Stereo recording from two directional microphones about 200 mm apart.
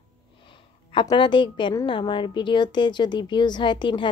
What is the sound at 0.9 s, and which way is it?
A woman's voice, 20° left (ahead or behind).